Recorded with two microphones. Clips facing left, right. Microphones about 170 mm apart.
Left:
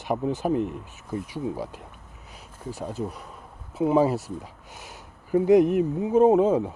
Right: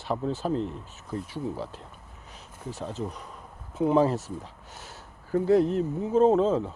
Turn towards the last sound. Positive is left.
turn(degrees=15)  # may be behind; listen again after turning